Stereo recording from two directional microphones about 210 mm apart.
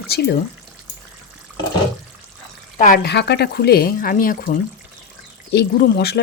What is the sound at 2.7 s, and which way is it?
Speech, 40° left (ahead or behind).